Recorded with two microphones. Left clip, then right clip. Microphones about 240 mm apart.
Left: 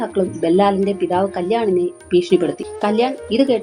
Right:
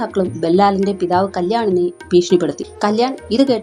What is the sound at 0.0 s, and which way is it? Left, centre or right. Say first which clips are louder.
A woman's voice: right 1 dB; right.